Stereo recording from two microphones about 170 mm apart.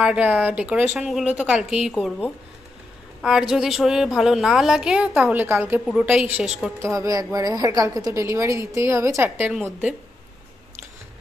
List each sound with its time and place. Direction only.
0.0 s a woman's voice: 5° right (ahead or behind)
5.9 s a woman's voice: centre (ahead or behind)
9.5 s a woman's voice: centre (ahead or behind)